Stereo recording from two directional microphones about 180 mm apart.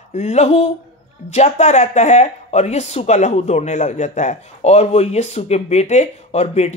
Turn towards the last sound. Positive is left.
turn(degrees=35)  # may be behind; listen again after turning